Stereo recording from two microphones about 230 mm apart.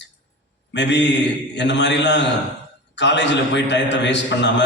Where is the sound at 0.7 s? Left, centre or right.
Left.